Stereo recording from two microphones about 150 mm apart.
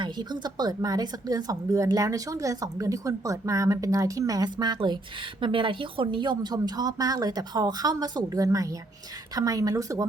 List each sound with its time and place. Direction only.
0.0 s a woman's voice: 30° right (ahead or behind)